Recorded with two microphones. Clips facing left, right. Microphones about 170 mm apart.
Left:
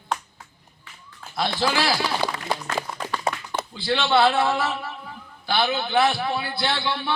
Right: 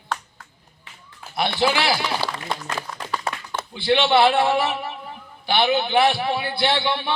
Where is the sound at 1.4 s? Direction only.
20° right (ahead or behind).